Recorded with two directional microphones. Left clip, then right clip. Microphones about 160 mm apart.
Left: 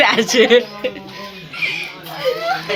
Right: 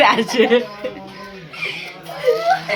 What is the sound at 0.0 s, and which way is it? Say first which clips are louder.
Speech: left 1 dB; centre (ahead or behind).